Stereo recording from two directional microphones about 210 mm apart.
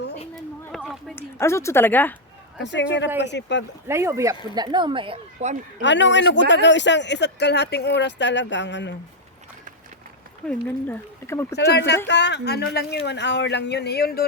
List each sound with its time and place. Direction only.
0.6 s a sound: centre (ahead or behind)
1.1 s a woman's voice: 10° left (ahead or behind)
2.6 s speech: 55° left (ahead or behind)
3.8 s speech: 15° right (ahead or behind); by 5.5 s 30° right (ahead or behind)
5.8 s speech: 60° left (ahead or behind)
10.4 s speech: 10° left (ahead or behind)
11.5 s speech: 55° left (ahead or behind)